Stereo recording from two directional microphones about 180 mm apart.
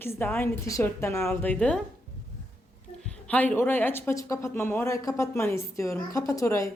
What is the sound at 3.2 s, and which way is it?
Speech, 10° left (ahead or behind).